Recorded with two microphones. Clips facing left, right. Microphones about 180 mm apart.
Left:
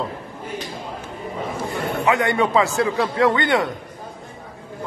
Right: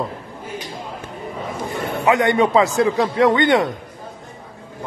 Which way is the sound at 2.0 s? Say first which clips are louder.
Right 4 dB; 20° right (ahead or behind).